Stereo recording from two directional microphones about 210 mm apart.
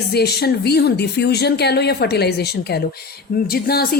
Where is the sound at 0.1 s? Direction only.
50° left (ahead or behind).